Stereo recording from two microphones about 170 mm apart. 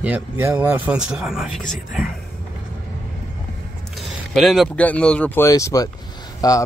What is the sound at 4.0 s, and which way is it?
Speech, centre (ahead or behind).